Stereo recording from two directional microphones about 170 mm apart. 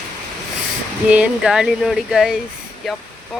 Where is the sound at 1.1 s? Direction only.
5° right (ahead or behind).